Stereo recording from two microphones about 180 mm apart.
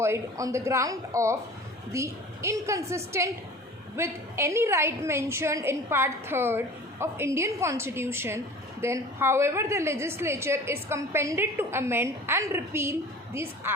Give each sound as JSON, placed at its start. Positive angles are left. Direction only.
{"t": 0.0, "sound": "a woman's voice", "side_deg": -15}